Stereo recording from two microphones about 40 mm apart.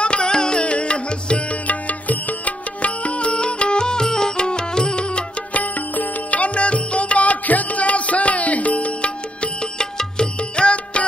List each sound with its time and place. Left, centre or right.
0.0 s music: left
5.5 s music: left